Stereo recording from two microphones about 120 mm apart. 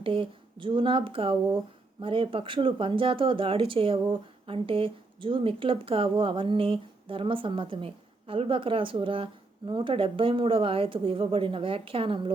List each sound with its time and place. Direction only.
0.0 s a woman's voice: 45° right (ahead or behind)